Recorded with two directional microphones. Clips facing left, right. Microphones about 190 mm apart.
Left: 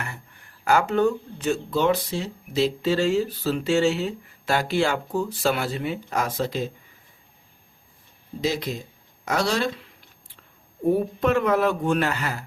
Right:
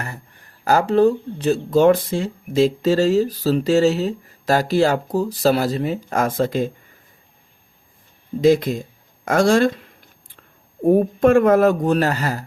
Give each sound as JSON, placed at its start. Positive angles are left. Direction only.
{"t": 0.6, "sound": "speech", "side_deg": -35}
{"t": 8.4, "sound": "speech", "side_deg": -50}
{"t": 9.2, "sound": "a sound", "side_deg": -50}
{"t": 10.8, "sound": "speech", "side_deg": -50}